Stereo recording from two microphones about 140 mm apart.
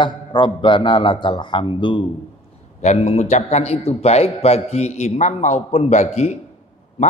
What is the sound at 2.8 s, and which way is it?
A man's voice, 50° left (ahead or behind).